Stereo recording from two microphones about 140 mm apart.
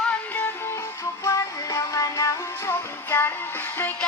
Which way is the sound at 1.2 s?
20° left (ahead or behind).